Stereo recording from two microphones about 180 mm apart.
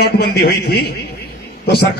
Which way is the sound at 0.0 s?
65° left (ahead or behind).